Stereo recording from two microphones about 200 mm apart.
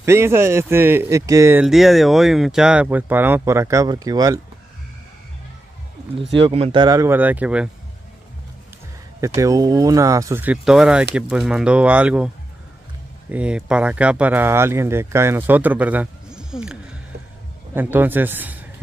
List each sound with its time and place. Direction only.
0.0 s speech: 10° right (ahead or behind)
6.3 s speech: 30° right (ahead or behind); by 7.7 s 5° right (ahead or behind)
9.2 s speech: 15° right (ahead or behind)
13.3 s speech: 5° right (ahead or behind)
17.7 s speech: 10° right (ahead or behind)